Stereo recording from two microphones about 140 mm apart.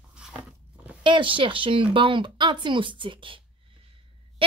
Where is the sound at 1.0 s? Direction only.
35° right (ahead or behind).